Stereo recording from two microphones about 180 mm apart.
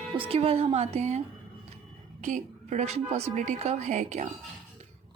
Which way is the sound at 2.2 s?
40° right (ahead or behind).